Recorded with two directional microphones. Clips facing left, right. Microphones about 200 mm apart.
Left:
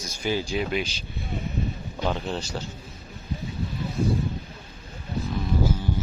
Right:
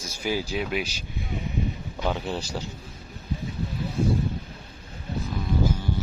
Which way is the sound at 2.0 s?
10° right (ahead or behind).